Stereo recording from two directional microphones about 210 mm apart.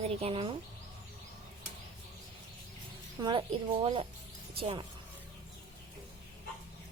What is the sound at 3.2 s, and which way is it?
Speech, 25° right (ahead or behind).